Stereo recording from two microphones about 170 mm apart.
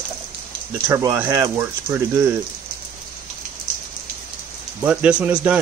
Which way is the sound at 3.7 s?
50° right (ahead or behind).